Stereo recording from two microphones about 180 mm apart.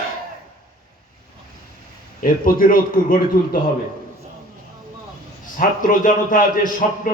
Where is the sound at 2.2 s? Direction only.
50° left (ahead or behind).